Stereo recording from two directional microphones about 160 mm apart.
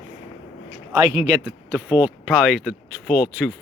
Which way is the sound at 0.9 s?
20° right (ahead or behind).